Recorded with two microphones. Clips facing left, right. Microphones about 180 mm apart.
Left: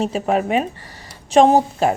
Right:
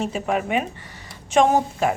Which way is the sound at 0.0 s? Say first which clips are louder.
Left 4 dB; 35° left (ahead or behind).